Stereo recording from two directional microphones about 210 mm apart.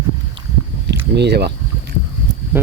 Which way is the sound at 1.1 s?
50° right (ahead or behind).